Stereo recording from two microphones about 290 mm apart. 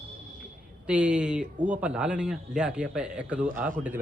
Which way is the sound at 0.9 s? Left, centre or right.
Centre.